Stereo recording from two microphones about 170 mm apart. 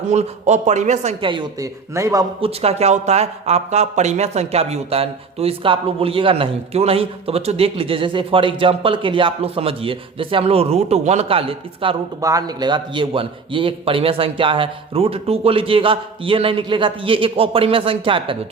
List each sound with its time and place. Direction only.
0.1 s speech: 40° right (ahead or behind); by 2.2 s 20° right (ahead or behind)
2.4 s speech: 35° right (ahead or behind)
12.2 s speech: 20° right (ahead or behind)